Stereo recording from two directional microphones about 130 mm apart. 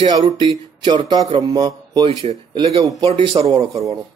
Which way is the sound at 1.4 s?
30° right (ahead or behind).